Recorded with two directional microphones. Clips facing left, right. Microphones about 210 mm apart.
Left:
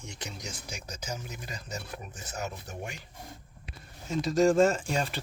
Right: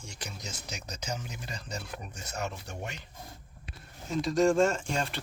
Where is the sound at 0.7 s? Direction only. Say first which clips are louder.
Right 2 dB; 10° left (ahead or behind).